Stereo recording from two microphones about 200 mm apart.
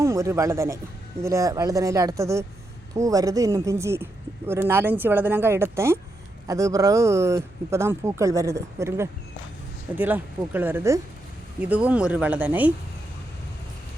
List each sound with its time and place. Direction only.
0.0 s speech: 15° right (ahead or behind)